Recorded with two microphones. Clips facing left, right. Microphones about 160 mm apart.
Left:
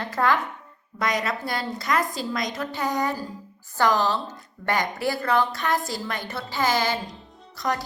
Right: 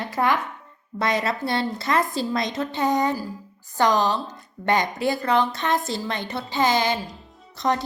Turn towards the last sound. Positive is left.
turn(degrees=-25)  # may be behind; listen again after turning